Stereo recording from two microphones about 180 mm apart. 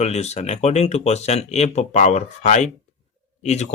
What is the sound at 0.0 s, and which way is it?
Speech, 35° left (ahead or behind).